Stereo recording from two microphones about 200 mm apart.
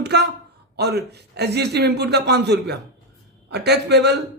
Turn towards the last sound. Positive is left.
turn(degrees=-55)  # may be behind; listen again after turning